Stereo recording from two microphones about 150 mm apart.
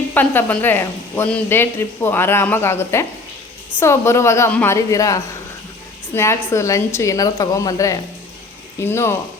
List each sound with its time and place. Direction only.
0.1 s a woman's voice: 15° left (ahead or behind)